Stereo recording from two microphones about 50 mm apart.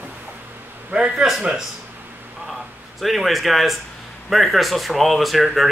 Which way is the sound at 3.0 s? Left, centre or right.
Centre.